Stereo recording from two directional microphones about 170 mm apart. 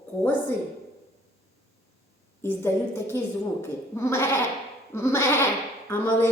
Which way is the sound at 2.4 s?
15° left (ahead or behind).